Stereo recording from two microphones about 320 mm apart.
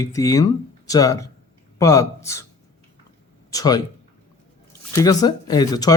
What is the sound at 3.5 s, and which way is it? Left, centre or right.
Speech, centre.